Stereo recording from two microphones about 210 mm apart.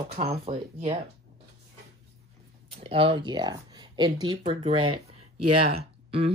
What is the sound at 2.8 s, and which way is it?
Speech, 25° right (ahead or behind).